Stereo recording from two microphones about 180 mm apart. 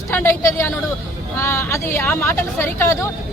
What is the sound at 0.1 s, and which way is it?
Speech, 15° left (ahead or behind).